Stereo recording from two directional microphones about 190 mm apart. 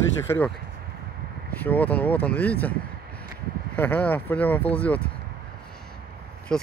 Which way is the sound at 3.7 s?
5° left (ahead or behind).